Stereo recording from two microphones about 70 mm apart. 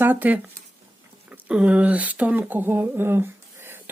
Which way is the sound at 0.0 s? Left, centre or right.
Right.